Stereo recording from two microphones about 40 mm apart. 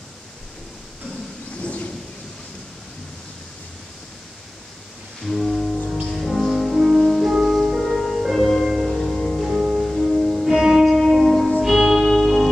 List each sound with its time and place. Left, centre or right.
1.6 s a sound: left
5.2 s music: centre
8.6 s music: centre
8.9 s music: centre